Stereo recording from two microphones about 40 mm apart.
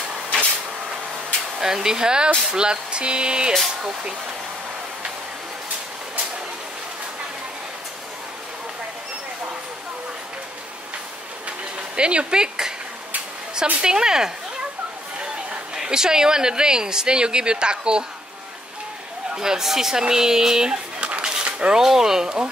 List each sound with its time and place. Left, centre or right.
1.6 s a woman's voice: centre
12.0 s a woman's voice: right
13.7 s speech: centre
15.7 s a woman's voice: centre
19.3 s speech: centre
21.0 s a sound: right
21.7 s speech: centre